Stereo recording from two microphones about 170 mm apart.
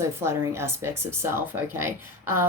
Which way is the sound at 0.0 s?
15° right (ahead or behind).